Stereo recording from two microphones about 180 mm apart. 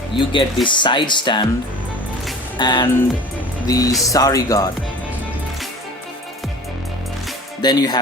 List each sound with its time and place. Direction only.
0.2 s speech: 25° left (ahead or behind)
2.6 s speech: 25° left (ahead or behind)
7.6 s speech: 20° left (ahead or behind)